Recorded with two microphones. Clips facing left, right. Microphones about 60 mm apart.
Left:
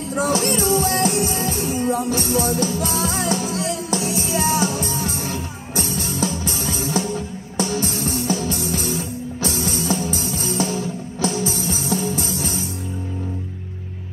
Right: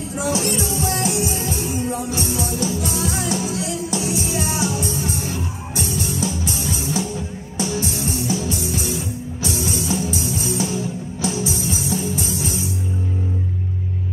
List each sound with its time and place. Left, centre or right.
0.1 s music: left